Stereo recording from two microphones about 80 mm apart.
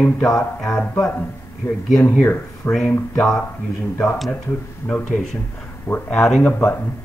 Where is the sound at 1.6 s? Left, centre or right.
Left.